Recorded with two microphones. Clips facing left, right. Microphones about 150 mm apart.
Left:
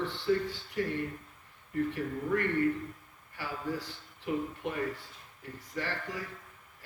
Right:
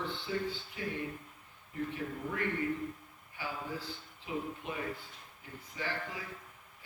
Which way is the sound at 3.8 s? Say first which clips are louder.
Left 2 dB; 75° left (ahead or behind).